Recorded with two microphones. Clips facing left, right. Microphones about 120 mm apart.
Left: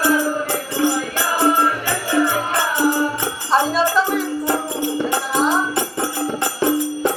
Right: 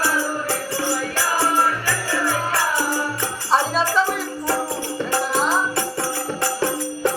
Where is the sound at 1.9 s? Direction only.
20° left (ahead or behind).